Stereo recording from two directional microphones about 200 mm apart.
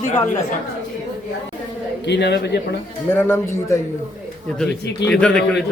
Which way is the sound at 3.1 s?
15° left (ahead or behind).